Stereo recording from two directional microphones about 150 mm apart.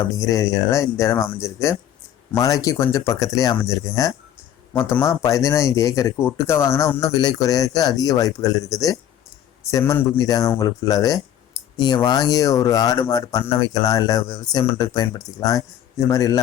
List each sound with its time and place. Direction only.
0.0 s speech: 20° left (ahead or behind)
11.6 s a sound: 25° left (ahead or behind)
11.9 s speech: 25° left (ahead or behind)